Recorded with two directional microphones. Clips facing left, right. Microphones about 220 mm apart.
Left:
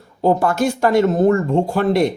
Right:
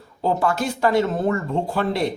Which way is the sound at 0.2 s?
50° left (ahead or behind).